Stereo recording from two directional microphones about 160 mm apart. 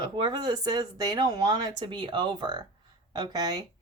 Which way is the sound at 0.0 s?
25° right (ahead or behind).